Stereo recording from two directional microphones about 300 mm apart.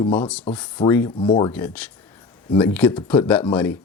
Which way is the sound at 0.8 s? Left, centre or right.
Centre.